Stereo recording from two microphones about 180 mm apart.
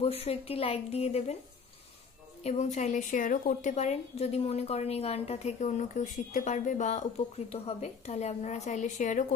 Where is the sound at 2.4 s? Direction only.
40° left (ahead or behind).